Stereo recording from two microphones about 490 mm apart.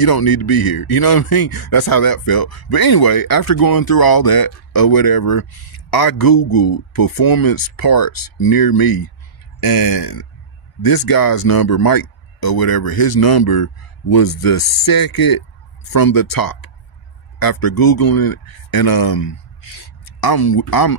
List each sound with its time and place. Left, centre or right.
0.0 s a man's voice: left